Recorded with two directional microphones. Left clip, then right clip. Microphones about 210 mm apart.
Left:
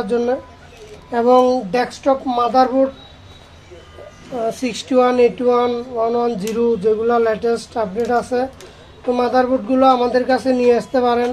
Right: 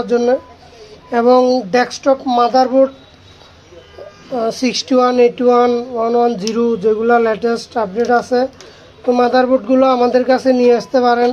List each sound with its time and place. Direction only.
0.0 s speech: 35° right (ahead or behind)
4.4 s speech: 35° right (ahead or behind)